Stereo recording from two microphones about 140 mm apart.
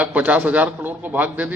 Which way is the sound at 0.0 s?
10° right (ahead or behind).